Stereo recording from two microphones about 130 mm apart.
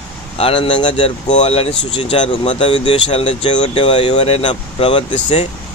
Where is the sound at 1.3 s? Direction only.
55° left (ahead or behind).